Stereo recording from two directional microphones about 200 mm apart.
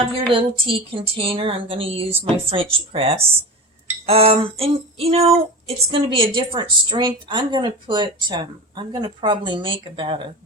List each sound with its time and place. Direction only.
0.3 s speech: 25° right (ahead or behind)